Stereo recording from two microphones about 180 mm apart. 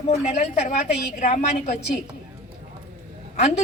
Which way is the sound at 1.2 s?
40° left (ahead or behind).